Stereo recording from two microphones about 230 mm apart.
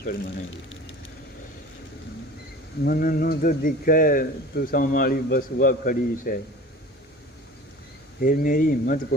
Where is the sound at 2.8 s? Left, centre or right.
Left.